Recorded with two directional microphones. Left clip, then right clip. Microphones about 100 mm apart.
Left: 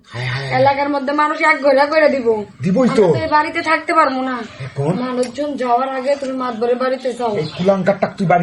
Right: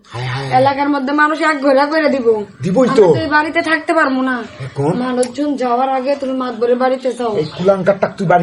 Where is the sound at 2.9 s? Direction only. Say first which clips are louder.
Right 2 dB; centre (ahead or behind).